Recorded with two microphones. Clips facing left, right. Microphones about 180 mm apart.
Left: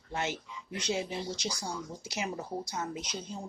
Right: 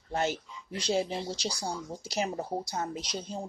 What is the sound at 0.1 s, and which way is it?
Speech, 35° right (ahead or behind).